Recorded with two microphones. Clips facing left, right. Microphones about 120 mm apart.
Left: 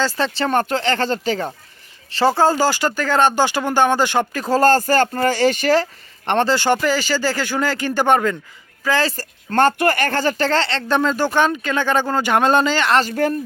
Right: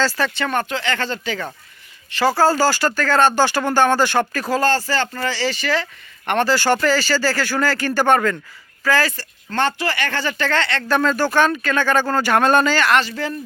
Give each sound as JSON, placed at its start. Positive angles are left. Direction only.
{"t": 0.0, "sound": "speech", "side_deg": 25}
{"t": 2.1, "sound": "speech", "side_deg": 25}
{"t": 4.5, "sound": "speech", "side_deg": 45}
{"t": 6.2, "sound": "speech", "side_deg": 25}
{"t": 9.1, "sound": "speech", "side_deg": 45}
{"t": 13.0, "sound": "speech", "side_deg": 50}